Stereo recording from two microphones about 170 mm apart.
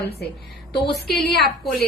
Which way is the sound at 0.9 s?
75° left (ahead or behind).